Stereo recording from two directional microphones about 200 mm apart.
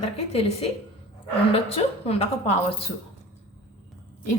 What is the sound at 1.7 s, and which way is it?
Speech, 30° left (ahead or behind).